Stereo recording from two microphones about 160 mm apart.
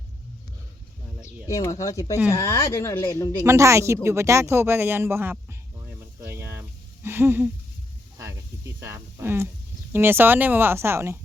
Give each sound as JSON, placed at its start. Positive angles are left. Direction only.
{"t": 1.2, "sound": "speech", "side_deg": 20}
{"t": 3.4, "sound": "speech", "side_deg": -20}
{"t": 6.1, "sound": "a sound", "side_deg": -15}
{"t": 8.2, "sound": "speech", "side_deg": -15}